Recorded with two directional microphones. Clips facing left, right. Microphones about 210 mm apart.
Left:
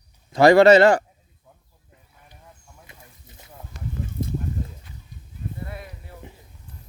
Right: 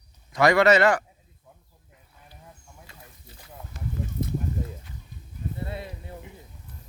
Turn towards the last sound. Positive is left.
turn(degrees=-25)  # may be behind; listen again after turning